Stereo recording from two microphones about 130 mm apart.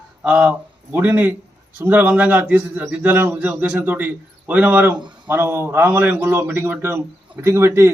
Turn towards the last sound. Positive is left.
turn(degrees=-20)  # may be behind; listen again after turning